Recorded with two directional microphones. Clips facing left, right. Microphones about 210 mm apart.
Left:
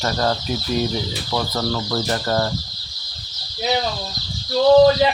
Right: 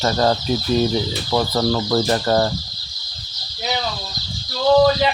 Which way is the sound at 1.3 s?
30° right (ahead or behind).